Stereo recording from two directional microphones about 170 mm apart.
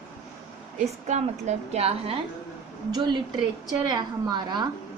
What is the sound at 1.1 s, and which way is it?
Speech, 40° right (ahead or behind).